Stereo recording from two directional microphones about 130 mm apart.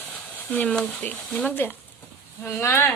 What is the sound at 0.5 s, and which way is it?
Speech, 10° left (ahead or behind).